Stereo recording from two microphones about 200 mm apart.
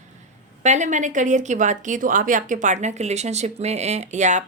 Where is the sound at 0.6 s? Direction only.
35° right (ahead or behind).